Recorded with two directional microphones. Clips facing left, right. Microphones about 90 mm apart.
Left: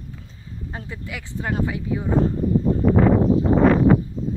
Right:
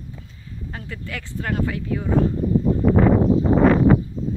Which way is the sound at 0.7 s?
20° left (ahead or behind).